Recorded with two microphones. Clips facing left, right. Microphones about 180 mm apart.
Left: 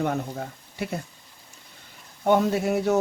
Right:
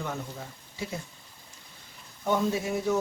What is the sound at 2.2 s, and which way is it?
Speech, 65° left (ahead or behind).